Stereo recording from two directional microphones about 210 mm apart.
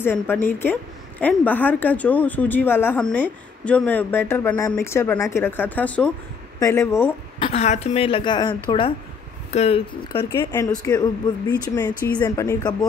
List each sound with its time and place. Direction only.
0.0 s speech: 10° left (ahead or behind)
7.3 s a woman's voice: 30° left (ahead or behind)
10.3 s speech: 10° left (ahead or behind)